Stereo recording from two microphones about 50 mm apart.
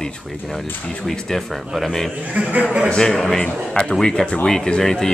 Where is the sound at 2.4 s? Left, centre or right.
Right.